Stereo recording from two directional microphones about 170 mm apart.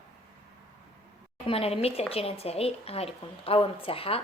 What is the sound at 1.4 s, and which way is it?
A woman's voice, 35° left (ahead or behind).